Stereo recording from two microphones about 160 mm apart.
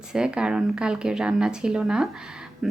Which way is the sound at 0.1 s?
5° right (ahead or behind).